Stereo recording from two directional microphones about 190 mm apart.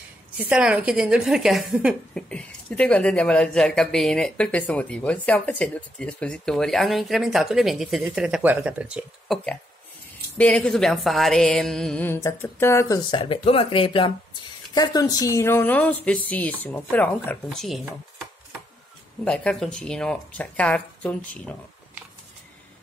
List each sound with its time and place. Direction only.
0.4 s speech: 5° right (ahead or behind)
10.3 s speech: 5° left (ahead or behind)
13.2 s a woman's voice: 30° left (ahead or behind); by 17.8 s centre (ahead or behind)
19.2 s speech: 5° left (ahead or behind)